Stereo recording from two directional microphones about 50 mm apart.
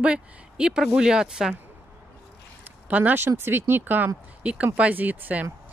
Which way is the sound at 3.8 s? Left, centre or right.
Right.